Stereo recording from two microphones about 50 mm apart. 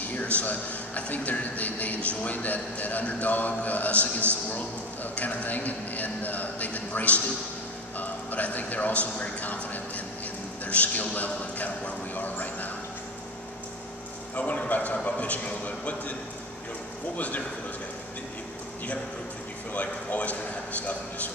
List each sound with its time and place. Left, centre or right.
0.1 s a man's voice: left
5.1 s a man's voice: left
10.6 s a sound: left
14.3 s a man's voice: left
19.7 s speech: left